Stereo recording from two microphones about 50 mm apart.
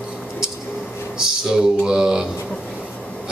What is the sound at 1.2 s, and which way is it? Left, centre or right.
A man's voice, centre.